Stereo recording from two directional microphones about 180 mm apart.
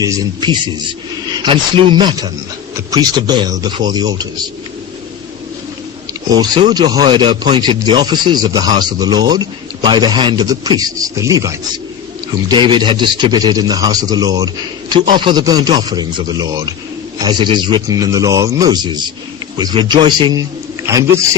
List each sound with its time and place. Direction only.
0.0 s speech: 25° right (ahead or behind)
6.3 s speech: 25° right (ahead or behind)